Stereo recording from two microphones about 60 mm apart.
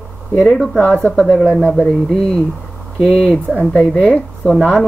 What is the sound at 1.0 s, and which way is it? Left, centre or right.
Speech, centre.